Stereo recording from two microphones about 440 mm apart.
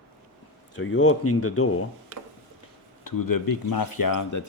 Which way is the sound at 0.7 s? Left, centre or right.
Left.